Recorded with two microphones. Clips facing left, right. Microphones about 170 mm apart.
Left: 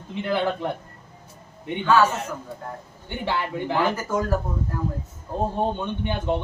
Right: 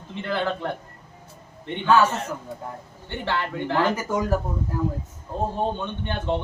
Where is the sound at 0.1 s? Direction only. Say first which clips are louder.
Left 2 dB; 10° left (ahead or behind).